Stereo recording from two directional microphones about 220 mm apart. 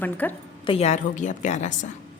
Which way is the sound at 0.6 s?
25° left (ahead or behind).